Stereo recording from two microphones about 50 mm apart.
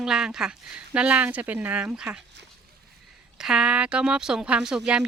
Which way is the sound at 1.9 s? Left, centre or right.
Centre.